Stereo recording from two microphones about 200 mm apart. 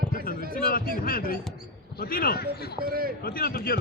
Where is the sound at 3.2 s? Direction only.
50° left (ahead or behind).